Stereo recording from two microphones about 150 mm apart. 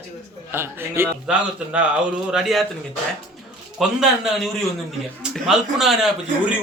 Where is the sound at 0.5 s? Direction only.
15° right (ahead or behind).